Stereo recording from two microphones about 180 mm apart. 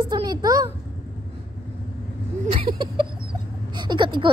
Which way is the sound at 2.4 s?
30° right (ahead or behind).